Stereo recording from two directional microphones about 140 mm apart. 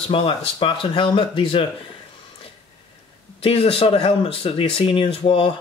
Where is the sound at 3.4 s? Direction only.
45° left (ahead or behind).